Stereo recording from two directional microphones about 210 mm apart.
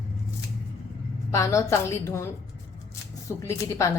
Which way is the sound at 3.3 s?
15° left (ahead or behind).